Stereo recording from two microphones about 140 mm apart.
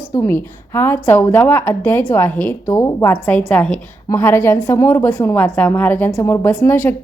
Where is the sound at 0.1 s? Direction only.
20° left (ahead or behind).